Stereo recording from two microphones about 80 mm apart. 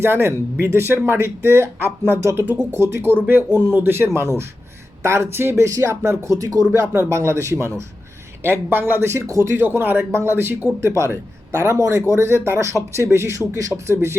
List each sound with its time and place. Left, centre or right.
0.0 s speech: right
6.7 s speech: right